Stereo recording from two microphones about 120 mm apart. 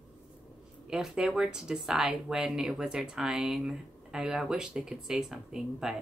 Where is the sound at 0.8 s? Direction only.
5° right (ahead or behind).